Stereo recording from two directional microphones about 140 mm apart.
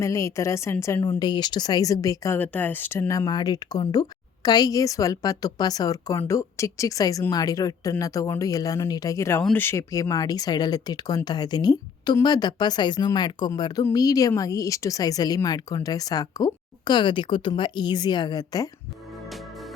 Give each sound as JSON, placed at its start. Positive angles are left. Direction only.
{"t": 0.0, "sound": "a woman's voice", "side_deg": 20}
{"t": 1.2, "sound": "a woman's voice", "side_deg": 30}